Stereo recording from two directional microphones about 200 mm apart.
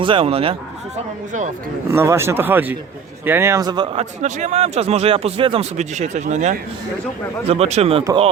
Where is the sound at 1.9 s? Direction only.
15° right (ahead or behind).